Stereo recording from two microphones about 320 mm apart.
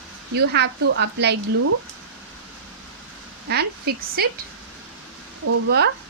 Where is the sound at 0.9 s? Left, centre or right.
Right.